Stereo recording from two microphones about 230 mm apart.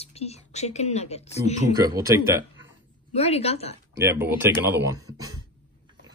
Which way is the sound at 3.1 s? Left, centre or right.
Left.